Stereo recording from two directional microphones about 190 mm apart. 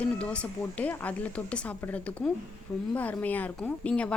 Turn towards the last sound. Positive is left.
turn(degrees=5)  # may be behind; listen again after turning